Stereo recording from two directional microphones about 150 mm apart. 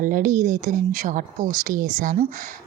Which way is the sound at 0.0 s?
60° right (ahead or behind).